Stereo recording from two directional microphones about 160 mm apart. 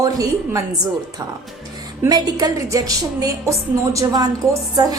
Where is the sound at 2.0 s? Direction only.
25° right (ahead or behind).